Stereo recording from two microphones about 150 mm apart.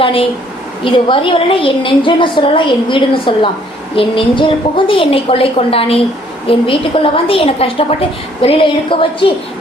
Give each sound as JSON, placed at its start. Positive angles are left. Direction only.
{"t": 0.0, "sound": "a woman's voice", "side_deg": 35}